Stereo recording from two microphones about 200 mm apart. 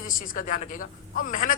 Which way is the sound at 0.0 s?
40° left (ahead or behind).